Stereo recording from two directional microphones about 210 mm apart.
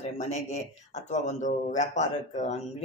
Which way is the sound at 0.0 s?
35° left (ahead or behind).